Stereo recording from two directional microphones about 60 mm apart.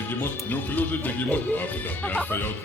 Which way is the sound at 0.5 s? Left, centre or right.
Left.